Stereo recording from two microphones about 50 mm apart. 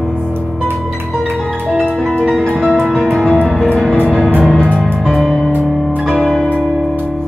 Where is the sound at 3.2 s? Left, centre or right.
Left.